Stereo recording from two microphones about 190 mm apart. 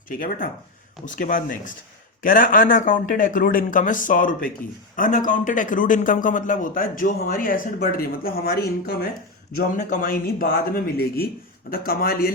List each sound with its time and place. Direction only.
0.1 s a man's voice: 50° left (ahead or behind)
9.6 s a man's voice: 45° left (ahead or behind)